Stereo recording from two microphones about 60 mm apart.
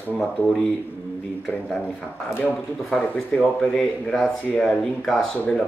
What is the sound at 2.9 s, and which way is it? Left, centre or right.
Speech, centre.